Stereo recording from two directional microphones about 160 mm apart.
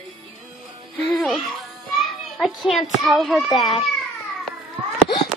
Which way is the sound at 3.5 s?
30° left (ahead or behind).